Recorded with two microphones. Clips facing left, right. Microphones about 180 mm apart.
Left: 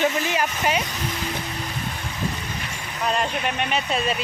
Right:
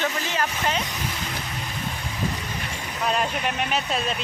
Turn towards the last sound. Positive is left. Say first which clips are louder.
# left 2 dB
turn(degrees=0)  # may be behind; listen again after turning